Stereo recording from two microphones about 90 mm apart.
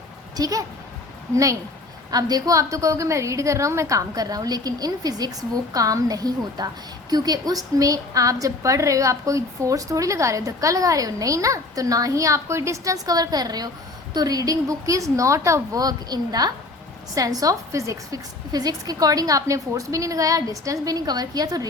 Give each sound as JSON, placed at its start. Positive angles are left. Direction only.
{"t": 0.3, "sound": "a woman's voice", "side_deg": -45}
{"t": 2.0, "sound": "a woman's voice", "side_deg": -45}